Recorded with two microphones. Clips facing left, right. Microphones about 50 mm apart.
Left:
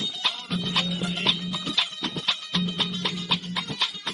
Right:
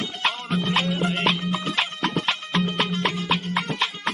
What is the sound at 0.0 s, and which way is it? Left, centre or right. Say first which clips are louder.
Music: right 4 dB; right.